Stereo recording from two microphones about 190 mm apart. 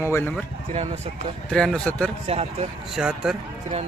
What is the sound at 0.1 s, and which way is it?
Speech, 10° left (ahead or behind).